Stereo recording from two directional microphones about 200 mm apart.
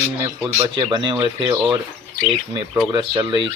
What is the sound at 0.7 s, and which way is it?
Speech, 20° right (ahead or behind).